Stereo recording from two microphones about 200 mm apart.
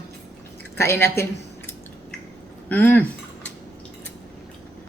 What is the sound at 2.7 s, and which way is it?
Speech, 10° left (ahead or behind).